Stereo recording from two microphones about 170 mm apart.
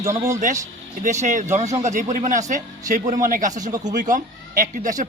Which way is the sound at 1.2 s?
45° right (ahead or behind).